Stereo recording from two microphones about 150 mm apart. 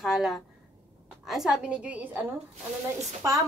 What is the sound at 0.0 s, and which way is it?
A woman's voice, centre (ahead or behind).